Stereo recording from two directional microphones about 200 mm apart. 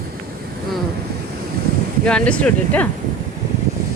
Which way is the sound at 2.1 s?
5° left (ahead or behind).